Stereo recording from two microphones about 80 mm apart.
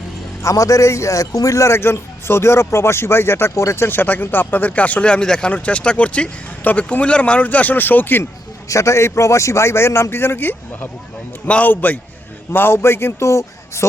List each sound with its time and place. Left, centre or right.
0.4 s a man's voice: left
8.7 s a man's voice: left